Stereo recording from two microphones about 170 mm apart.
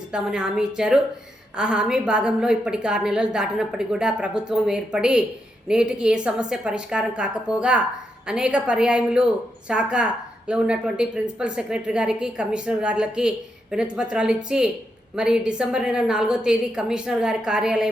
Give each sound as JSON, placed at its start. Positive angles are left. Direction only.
{"t": 0.1, "sound": "a woman's voice", "side_deg": -5}